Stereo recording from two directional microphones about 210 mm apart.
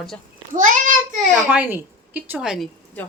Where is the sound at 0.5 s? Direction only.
40° right (ahead or behind).